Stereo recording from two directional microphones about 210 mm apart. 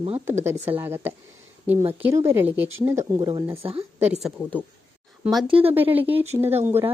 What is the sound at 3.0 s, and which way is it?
Speech, 20° right (ahead or behind).